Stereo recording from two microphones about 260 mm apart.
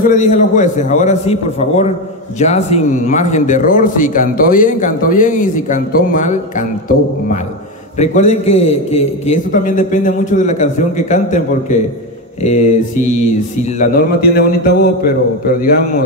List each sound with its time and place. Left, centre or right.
0.0 s speech: left
8.0 s a man's voice: left